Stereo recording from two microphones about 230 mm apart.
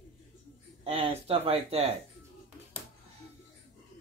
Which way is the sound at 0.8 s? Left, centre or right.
Right.